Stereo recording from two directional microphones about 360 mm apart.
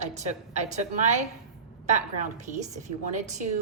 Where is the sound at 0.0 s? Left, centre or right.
Centre.